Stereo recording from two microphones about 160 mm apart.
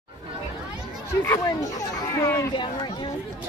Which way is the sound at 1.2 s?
20° left (ahead or behind).